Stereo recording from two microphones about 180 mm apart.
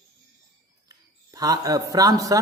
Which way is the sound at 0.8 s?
20° right (ahead or behind).